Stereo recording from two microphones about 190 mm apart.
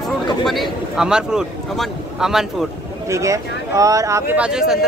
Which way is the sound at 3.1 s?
15° right (ahead or behind).